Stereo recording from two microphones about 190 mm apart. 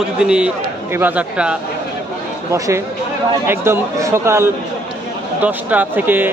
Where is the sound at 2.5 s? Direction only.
15° right (ahead or behind).